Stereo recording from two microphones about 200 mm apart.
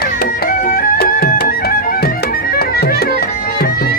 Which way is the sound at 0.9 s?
50° left (ahead or behind).